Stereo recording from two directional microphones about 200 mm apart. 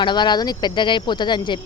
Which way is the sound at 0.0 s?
20° left (ahead or behind).